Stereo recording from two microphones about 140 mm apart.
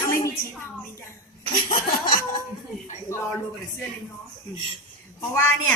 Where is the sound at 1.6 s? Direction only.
80° left.